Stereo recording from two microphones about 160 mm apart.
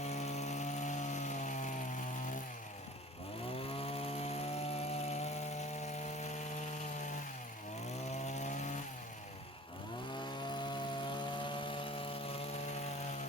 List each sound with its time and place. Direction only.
0.0 s chainsaw: 45° left (ahead or behind)
3.6 s chainsaw: 35° left (ahead or behind)
8.1 s chainsaw: 45° left (ahead or behind)
10.2 s chainsaw: 30° left (ahead or behind)